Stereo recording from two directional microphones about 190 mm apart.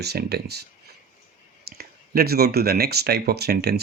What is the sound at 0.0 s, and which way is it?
Speech, 60° right (ahead or behind).